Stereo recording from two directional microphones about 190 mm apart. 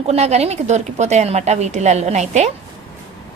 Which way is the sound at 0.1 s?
35° right (ahead or behind).